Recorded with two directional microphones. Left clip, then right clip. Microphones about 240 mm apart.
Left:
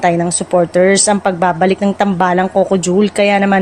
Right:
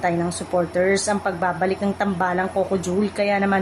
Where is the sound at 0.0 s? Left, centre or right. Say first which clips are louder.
Left 9 dB; left.